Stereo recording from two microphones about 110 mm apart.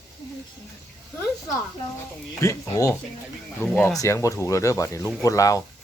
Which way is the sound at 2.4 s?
30° left (ahead or behind).